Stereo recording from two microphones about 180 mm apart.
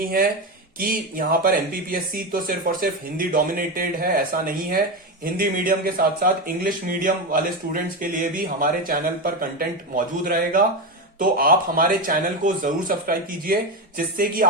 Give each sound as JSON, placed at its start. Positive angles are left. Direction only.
{"t": 0.0, "sound": "speech", "side_deg": -55}